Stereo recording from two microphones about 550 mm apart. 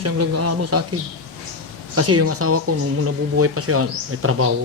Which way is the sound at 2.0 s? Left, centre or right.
Right.